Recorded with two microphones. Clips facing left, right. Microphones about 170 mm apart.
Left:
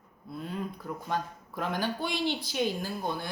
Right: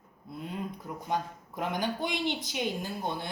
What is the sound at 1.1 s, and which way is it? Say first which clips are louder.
A woman's voice: right 1 dB; 20° right (ahead or behind).